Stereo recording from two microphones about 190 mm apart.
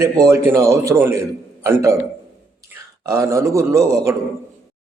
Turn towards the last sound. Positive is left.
turn(degrees=-15)  # may be behind; listen again after turning